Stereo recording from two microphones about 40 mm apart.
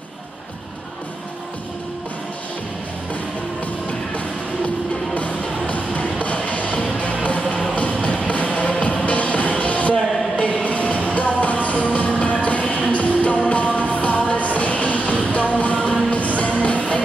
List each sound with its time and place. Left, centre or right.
6.2 s music: left
14.3 s train: left
15.3 s music: left